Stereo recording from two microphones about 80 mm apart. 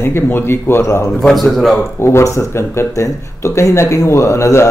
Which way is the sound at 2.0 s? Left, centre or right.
Left.